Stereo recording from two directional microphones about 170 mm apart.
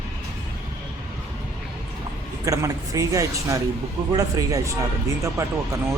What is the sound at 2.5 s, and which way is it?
Speech, 20° right (ahead or behind).